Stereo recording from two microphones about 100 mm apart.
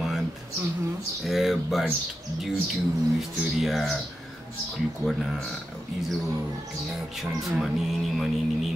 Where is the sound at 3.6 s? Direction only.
Centre (ahead or behind).